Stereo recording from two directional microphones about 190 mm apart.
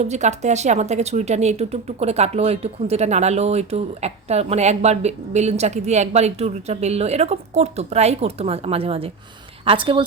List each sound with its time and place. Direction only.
0.0 s a woman's voice: 35° right (ahead or behind)